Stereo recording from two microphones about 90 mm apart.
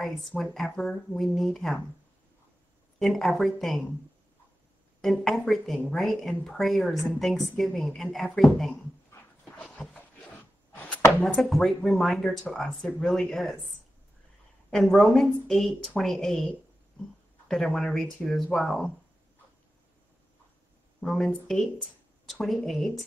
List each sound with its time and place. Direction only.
0.3 s speech: 10° left (ahead or behind)
3.0 s speech: centre (ahead or behind)
5.0 s speech: centre (ahead or behind)
9.4 s dog: 10° left (ahead or behind)
10.7 s chopping: 15° left (ahead or behind)
11.3 s speech: 5° left (ahead or behind)
14.7 s speech: 5° left (ahead or behind)
21.0 s speech: 5° left (ahead or behind)
22.3 s speech: centre (ahead or behind)